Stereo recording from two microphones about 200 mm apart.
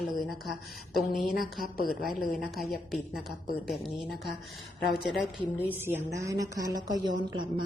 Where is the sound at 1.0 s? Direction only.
Centre (ahead or behind).